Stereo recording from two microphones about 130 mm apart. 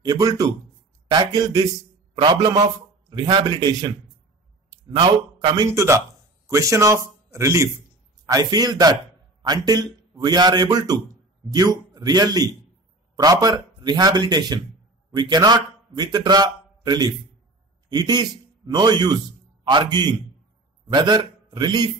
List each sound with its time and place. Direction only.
0.0 s a man's voice: 30° right (ahead or behind)
4.9 s a man's voice: 40° right (ahead or behind)